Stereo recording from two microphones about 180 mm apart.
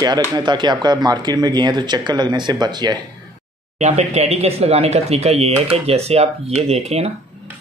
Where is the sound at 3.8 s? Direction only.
40° right (ahead or behind).